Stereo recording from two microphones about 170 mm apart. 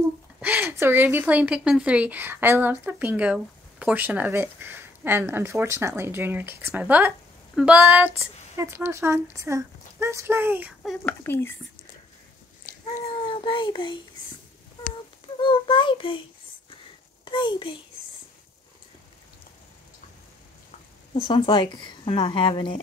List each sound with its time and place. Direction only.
0.4 s speech: 15° right (ahead or behind)
10.8 s speech: 5° left (ahead or behind)
12.7 s a sound: 50° left (ahead or behind)
13.0 s speech: 30° left (ahead or behind)
15.4 s speech: 30° left (ahead or behind)
17.2 s a child's voice: 30° left (ahead or behind)
21.1 s speech: 30° left (ahead or behind)